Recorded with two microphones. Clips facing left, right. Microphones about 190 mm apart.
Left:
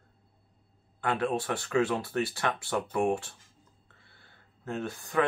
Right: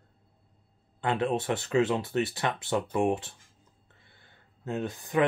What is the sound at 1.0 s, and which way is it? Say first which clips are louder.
Speech: right 1 dB; 20° right (ahead or behind).